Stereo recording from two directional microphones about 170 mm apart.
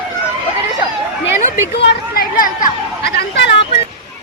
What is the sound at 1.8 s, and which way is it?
Speech, 75° left (ahead or behind).